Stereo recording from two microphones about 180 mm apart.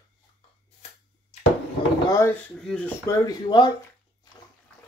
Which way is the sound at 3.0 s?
25° left (ahead or behind).